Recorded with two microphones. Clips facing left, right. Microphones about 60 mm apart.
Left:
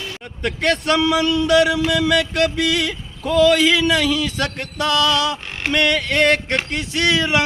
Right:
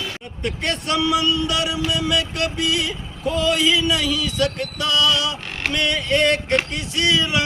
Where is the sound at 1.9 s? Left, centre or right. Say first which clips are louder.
Left 4 dB; left.